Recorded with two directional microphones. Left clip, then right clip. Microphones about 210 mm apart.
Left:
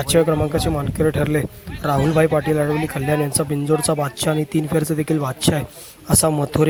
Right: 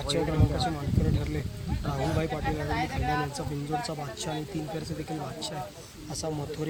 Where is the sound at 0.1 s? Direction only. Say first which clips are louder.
Left 16 dB; 40° left (ahead or behind).